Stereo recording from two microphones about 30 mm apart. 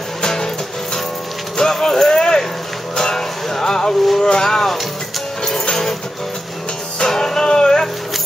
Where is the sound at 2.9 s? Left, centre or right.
Left.